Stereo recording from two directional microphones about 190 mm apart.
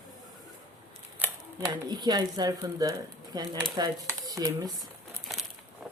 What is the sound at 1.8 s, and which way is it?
Speech, 20° right (ahead or behind).